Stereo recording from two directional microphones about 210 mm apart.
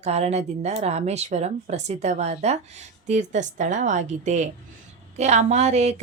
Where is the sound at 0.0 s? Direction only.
30° right (ahead or behind).